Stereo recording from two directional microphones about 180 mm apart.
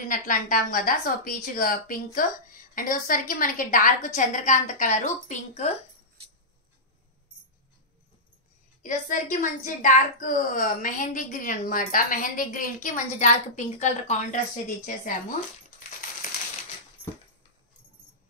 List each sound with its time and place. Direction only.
0.0 s a woman's voice: 50° left (ahead or behind)
8.8 s a woman's voice: 45° left (ahead or behind)